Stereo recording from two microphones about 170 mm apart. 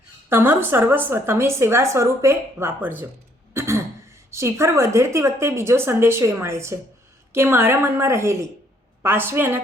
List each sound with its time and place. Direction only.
0.3 s a woman's voice: 10° right (ahead or behind)
3.5 s throat clearing: 15° right (ahead or behind)
4.3 s a woman's voice: 15° right (ahead or behind)